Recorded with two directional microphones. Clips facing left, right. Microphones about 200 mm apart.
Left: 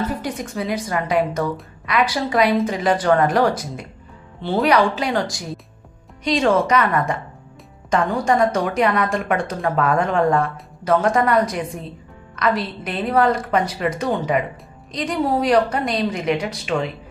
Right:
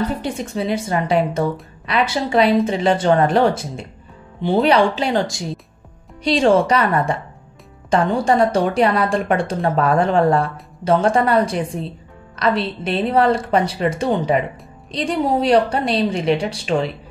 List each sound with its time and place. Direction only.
0.1 s a woman's voice: 25° right (ahead or behind)
4.4 s speech: 15° right (ahead or behind)
4.6 s a woman's voice: 25° right (ahead or behind)